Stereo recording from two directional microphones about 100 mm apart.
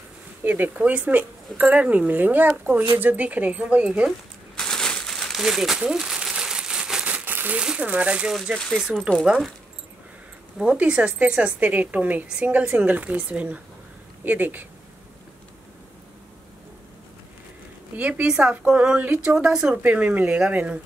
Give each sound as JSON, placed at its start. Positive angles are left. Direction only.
{"t": 0.4, "sound": "a woman's voice", "side_deg": -20}
{"t": 4.6, "sound": "crumpling", "side_deg": 5}
{"t": 8.5, "sound": "speech", "side_deg": 5}
{"t": 9.2, "sound": "speech", "side_deg": -5}
{"t": 10.6, "sound": "a woman's voice", "side_deg": -10}
{"t": 17.9, "sound": "a woman's voice", "side_deg": -15}